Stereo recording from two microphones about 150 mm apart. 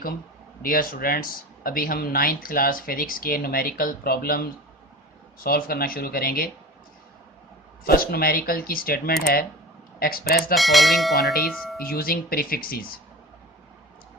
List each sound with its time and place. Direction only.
0.6 s speech: 70° left (ahead or behind)
7.9 s speech: 85° left
10.5 s speech: centre (ahead or behind)
11.8 s speech: 80° left